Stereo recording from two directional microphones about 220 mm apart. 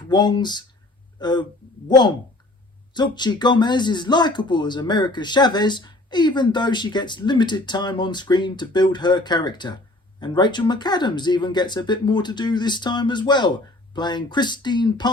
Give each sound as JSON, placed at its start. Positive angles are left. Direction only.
{"t": 0.1, "sound": "speech", "side_deg": 20}
{"t": 2.9, "sound": "speech", "side_deg": 20}